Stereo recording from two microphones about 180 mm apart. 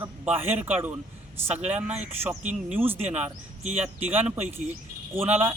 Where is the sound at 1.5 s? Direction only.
40° right (ahead or behind).